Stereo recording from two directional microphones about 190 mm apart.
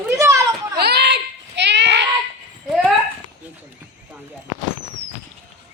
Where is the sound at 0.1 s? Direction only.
15° right (ahead or behind).